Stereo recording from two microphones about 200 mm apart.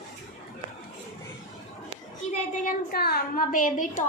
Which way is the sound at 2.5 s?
40° left (ahead or behind).